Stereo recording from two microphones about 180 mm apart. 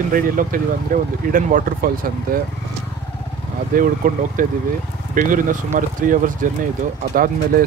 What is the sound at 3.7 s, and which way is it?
Speech, 50° right (ahead or behind).